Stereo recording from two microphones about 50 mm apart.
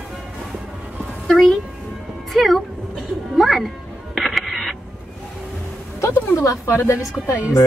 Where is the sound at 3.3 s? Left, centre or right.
Centre.